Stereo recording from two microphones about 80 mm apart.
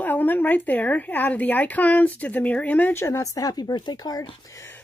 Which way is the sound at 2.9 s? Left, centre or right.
Left.